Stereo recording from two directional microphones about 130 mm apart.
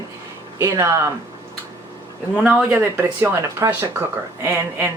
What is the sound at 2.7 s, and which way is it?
Speech, 15° right (ahead or behind).